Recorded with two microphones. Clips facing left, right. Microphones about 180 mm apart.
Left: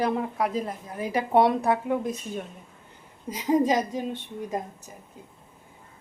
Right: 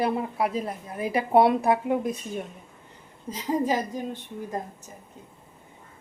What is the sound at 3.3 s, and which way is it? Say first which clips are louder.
A woman's voice: left 3 dB; 20° left (ahead or behind).